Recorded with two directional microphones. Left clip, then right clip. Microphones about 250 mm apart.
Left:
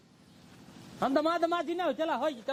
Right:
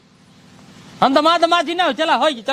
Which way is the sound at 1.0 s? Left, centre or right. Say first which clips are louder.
Right 14 dB; right.